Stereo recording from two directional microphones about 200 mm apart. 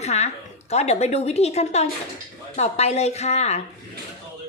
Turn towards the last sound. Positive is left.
turn(degrees=35)  # may be behind; listen again after turning